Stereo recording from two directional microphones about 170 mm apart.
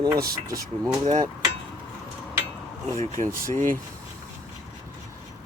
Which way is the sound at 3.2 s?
45° right (ahead or behind).